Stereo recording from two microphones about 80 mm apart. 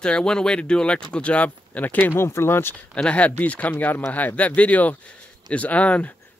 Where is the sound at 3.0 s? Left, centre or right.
Centre.